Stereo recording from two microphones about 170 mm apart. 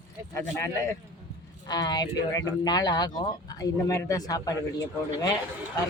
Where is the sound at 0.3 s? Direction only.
15° left (ahead or behind).